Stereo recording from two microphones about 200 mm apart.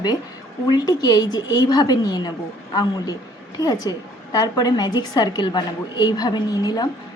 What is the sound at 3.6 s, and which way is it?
A woman's voice, 20° left (ahead or behind).